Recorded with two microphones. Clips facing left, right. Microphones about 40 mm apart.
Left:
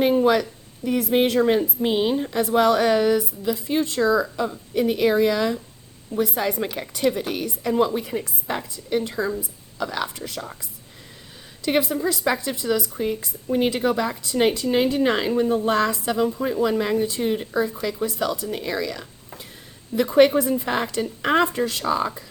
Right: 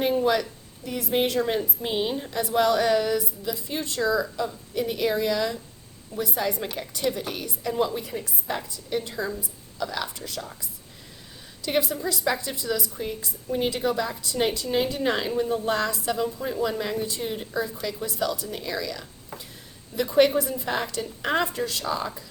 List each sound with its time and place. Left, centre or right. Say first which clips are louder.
0.0 s a sound: left 5 dB; left
0.9 s a woman's voice: left 5 dB; left
6.1 s a woman's voice: left 4 dB; left
11.6 s a woman's voice: left 4 dB; left
14.8 s a woman's voice: left 3 dB; left
16.4 s a woman's voice: left 5 dB; left